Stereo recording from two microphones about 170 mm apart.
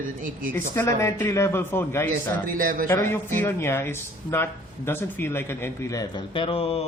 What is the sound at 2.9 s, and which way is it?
Speech, 15° left (ahead or behind).